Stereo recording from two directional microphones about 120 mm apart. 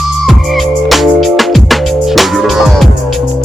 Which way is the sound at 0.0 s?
Centre (ahead or behind).